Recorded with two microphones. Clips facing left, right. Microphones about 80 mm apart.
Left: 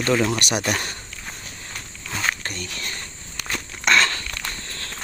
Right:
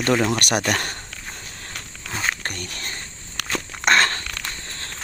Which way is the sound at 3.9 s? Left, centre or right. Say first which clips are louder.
Right 1 dB; right.